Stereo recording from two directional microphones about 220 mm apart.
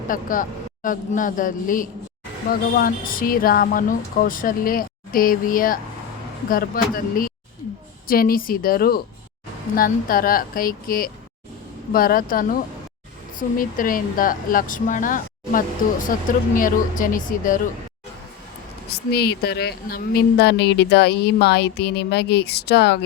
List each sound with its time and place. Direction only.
0.1 s speech: 40° left (ahead or behind)
13.6 s speech: 40° left (ahead or behind)
18.9 s speech: 45° left (ahead or behind)